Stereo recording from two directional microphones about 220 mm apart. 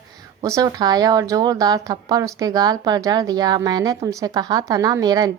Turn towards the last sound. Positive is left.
turn(degrees=-15)  # may be behind; listen again after turning